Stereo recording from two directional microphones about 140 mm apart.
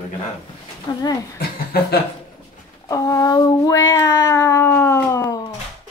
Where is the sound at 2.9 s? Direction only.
25° left (ahead or behind).